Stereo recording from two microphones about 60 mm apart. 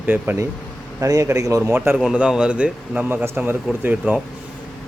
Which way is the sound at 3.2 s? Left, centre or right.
Right.